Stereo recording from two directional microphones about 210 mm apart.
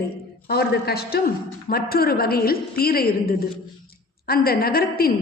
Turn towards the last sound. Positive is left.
turn(degrees=45)  # may be behind; listen again after turning